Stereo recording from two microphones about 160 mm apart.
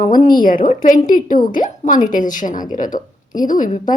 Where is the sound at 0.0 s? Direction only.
60° left (ahead or behind).